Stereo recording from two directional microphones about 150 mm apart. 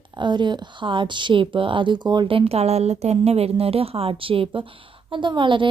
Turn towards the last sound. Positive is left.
turn(degrees=-35)  # may be behind; listen again after turning